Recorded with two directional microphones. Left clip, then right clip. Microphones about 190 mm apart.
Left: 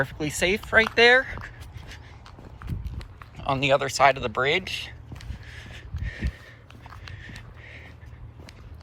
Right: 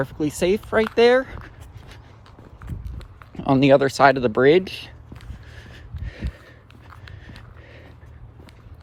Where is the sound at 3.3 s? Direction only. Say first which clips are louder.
Right 6 dB; 50° right (ahead or behind).